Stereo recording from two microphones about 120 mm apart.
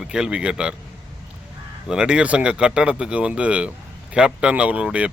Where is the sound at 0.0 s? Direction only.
5° right (ahead or behind).